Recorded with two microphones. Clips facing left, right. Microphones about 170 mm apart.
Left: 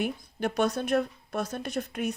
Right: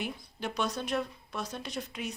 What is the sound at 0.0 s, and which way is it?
Speech, 50° left (ahead or behind).